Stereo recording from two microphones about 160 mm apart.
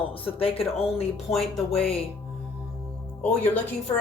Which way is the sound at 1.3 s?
5° left (ahead or behind).